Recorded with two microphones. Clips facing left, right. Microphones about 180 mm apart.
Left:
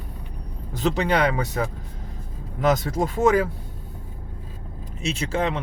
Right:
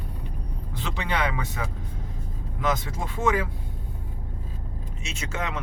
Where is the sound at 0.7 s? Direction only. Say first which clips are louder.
Left 8 dB; 40° left (ahead or behind).